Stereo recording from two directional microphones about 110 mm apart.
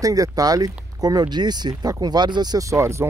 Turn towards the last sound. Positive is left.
turn(degrees=-25)  # may be behind; listen again after turning